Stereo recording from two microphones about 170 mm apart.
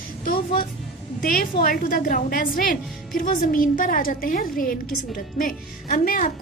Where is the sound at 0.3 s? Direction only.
55° left (ahead or behind).